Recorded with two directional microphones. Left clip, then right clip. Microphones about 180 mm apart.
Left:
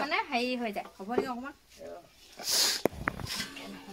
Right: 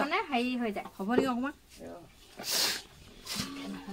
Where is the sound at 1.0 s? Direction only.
40° right (ahead or behind).